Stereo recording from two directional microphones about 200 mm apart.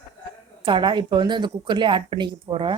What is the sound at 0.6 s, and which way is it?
Speech, 25° right (ahead or behind).